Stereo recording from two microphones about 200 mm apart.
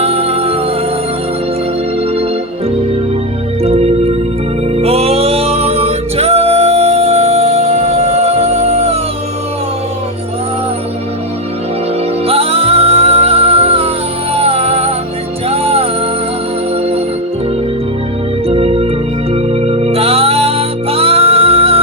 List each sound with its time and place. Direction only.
0.0 s music: 30° right (ahead or behind)
3.6 s music: 30° right (ahead or behind)
12.2 s music: 30° right (ahead or behind)
18.4 s organ: 30° right (ahead or behind)
19.3 s music: 30° right (ahead or behind)